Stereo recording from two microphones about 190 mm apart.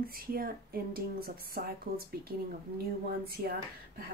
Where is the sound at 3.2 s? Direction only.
50° right (ahead or behind).